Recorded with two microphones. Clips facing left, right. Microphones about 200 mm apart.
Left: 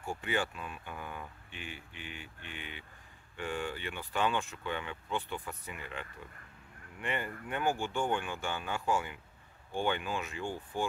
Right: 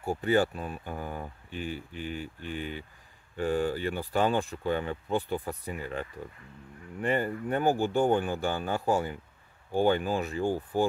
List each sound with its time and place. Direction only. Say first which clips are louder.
0.0 s speech: right 9 dB; 40° right (ahead or behind)